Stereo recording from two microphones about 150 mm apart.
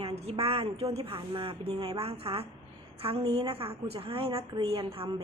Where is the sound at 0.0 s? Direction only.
40° right (ahead or behind).